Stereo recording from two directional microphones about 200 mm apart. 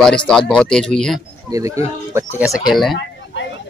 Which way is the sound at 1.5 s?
15° right (ahead or behind).